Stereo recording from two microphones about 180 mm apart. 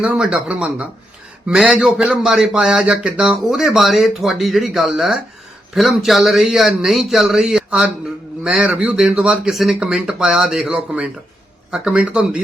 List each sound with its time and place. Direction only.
0.0 s a man's voice: 5° right (ahead or behind)